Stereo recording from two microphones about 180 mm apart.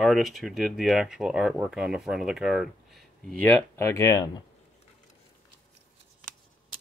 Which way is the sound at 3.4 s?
10° left (ahead or behind).